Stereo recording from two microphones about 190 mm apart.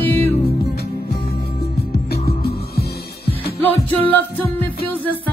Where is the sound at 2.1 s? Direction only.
55° left (ahead or behind).